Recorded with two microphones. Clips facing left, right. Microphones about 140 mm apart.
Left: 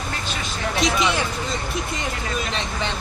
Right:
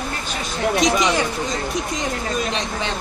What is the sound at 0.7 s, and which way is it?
Speech, 45° right (ahead or behind).